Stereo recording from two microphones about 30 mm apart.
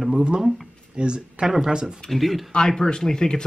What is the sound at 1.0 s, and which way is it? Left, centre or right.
Speech, right.